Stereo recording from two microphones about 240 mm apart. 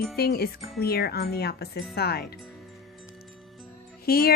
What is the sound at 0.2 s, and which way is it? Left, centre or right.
Speech, left.